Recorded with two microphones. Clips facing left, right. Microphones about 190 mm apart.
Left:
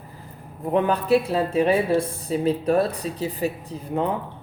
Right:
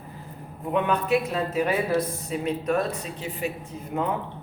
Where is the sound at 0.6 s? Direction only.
35° left (ahead or behind).